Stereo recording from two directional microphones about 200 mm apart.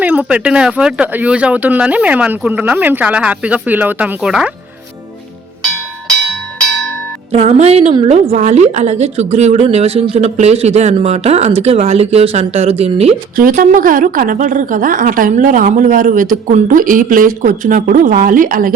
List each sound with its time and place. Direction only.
0.0 s speech: 5° right (ahead or behind)
7.3 s a woman's voice: 30° right (ahead or behind)
13.3 s a woman's voice: 45° right (ahead or behind)